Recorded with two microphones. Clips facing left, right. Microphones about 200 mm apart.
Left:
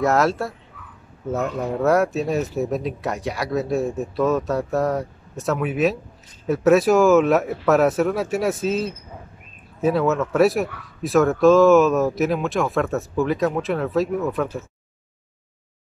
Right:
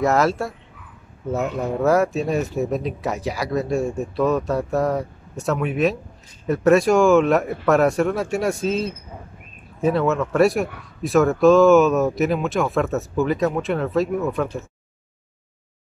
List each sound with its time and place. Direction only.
0.0 s a man's voice: centre (ahead or behind)
1.6 s a man's voice: centre (ahead or behind)